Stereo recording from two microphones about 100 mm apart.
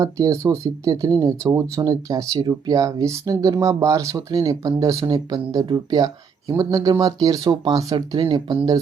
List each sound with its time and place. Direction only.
0.0 s speech: 35° right (ahead or behind)
7.9 s speech: 50° right (ahead or behind)